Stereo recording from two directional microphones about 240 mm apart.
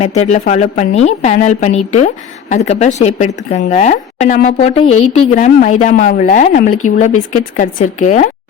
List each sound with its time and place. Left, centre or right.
0.0 s speech: left